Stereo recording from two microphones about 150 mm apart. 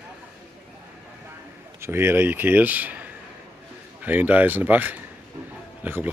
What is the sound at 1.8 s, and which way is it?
Speech, 15° right (ahead or behind).